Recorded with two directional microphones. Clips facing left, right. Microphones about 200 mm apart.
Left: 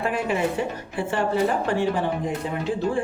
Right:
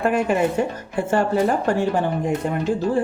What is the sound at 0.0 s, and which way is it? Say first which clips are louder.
Speech: right 5 dB; 45° right (ahead or behind).